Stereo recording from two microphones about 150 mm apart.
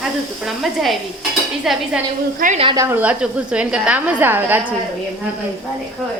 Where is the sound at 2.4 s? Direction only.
70° right (ahead or behind).